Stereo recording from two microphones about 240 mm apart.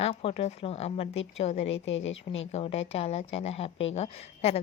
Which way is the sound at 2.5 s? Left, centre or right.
Left.